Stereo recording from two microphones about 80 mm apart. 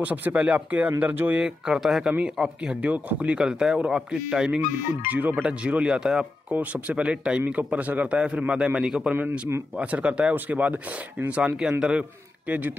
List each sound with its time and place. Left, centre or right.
0.0 s speech: centre
1.4 s a man's voice: centre
2.8 s a man's voice: centre
6.5 s a man's voice: centre